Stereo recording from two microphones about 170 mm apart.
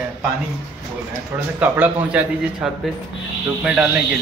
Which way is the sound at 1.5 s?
10° right (ahead or behind).